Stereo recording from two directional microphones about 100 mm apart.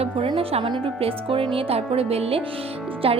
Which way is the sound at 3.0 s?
70° right (ahead or behind).